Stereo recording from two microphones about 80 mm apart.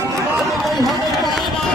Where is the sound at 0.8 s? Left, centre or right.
Centre.